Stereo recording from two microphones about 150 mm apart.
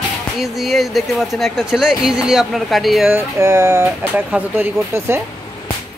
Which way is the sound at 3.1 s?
20° right (ahead or behind).